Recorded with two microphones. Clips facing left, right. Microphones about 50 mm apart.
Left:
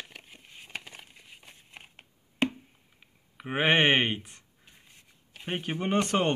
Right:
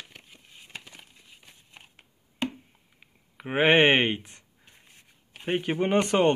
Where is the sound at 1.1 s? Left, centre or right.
Left.